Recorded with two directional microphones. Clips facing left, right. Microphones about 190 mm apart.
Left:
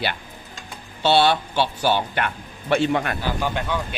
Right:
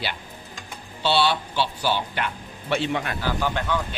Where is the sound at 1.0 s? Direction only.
50° left (ahead or behind).